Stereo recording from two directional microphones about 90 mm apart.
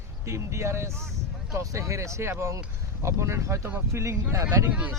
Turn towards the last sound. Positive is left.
turn(degrees=-35)  # may be behind; listen again after turning